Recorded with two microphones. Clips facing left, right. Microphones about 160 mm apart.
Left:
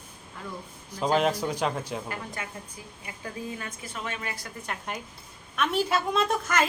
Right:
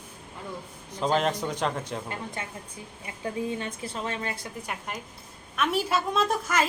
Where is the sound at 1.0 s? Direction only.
5° left (ahead or behind).